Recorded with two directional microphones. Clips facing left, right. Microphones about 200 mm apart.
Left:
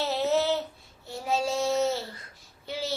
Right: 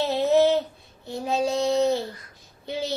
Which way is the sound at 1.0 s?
15° right (ahead or behind).